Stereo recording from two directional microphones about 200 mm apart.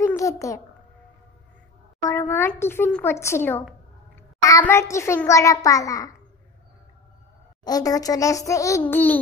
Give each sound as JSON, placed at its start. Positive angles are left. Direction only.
{"t": 0.0, "sound": "babbling", "side_deg": 15}
{"t": 2.0, "sound": "a child's voice", "side_deg": 10}
{"t": 7.6, "sound": "a child's voice", "side_deg": 20}